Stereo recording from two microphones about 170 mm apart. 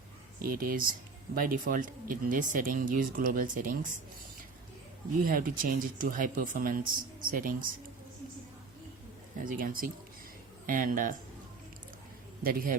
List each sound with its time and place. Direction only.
0.4 s speech: 55° right (ahead or behind)
5.2 s speech: 55° right (ahead or behind)
9.4 s speech: 55° right (ahead or behind)
12.4 s speech: 60° right (ahead or behind)